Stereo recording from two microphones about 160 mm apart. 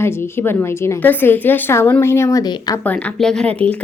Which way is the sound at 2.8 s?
10° left (ahead or behind).